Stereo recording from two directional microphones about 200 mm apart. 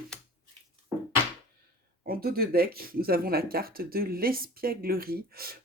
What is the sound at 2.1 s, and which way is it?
Speech, 50° right (ahead or behind).